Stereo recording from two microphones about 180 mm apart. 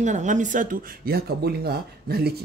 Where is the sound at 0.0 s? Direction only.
40° right (ahead or behind).